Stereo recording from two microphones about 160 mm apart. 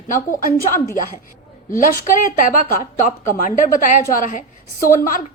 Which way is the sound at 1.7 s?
60° left (ahead or behind).